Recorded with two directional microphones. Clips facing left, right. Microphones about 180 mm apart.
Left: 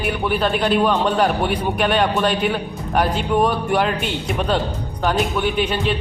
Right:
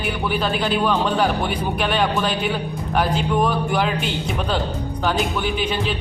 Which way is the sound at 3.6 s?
Centre (ahead or behind).